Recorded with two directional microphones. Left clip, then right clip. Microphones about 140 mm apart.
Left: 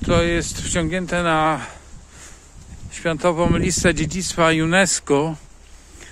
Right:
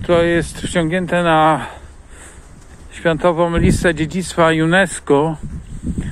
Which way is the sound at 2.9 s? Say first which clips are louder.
Right 5 dB; 30° left (ahead or behind).